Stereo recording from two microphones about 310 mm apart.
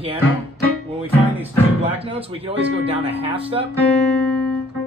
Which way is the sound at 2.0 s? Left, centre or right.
Centre.